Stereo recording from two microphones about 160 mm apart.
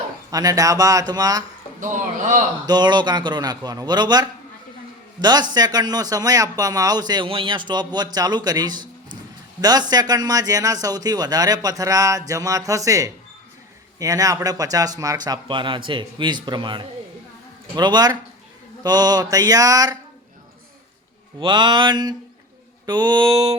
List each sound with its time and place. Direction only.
0.3 s speech: 25° right (ahead or behind)
1.8 s a man's voice: 55° right (ahead or behind)
2.6 s speech: 25° right (ahead or behind)
21.3 s speech: 30° right (ahead or behind)